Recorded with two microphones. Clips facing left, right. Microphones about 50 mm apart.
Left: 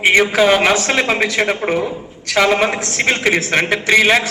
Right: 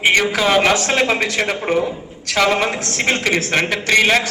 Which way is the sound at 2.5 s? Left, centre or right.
Left.